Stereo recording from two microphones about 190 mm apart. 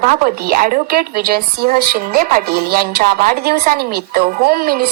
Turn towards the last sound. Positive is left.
turn(degrees=-50)  # may be behind; listen again after turning